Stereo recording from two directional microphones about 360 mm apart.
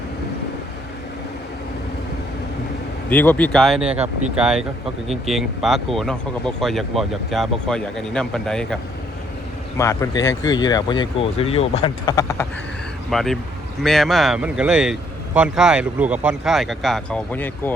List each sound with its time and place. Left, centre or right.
3.1 s speech: centre
3.8 s speech: centre
4.4 s speech: centre